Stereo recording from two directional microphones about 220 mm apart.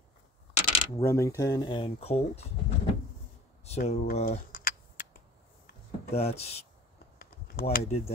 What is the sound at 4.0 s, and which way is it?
Speech, 45° left (ahead or behind).